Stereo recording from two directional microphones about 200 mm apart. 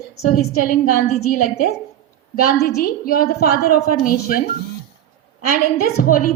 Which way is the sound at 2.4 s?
50° left (ahead or behind).